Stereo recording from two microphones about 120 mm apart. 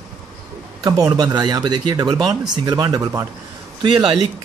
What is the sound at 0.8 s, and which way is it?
Speech, 30° right (ahead or behind).